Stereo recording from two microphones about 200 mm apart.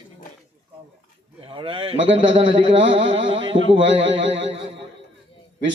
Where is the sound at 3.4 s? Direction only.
65° right (ahead or behind).